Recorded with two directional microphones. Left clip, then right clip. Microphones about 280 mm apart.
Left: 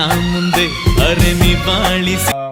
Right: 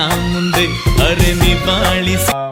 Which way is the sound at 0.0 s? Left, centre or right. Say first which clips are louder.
Left 1 dB; centre.